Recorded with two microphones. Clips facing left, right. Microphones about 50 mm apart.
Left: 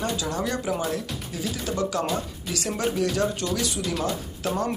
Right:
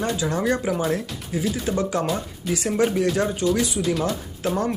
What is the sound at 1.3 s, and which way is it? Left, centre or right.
Speech, right.